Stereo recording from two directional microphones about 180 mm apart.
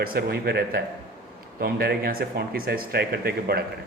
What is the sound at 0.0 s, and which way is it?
A man's voice, 60° right (ahead or behind).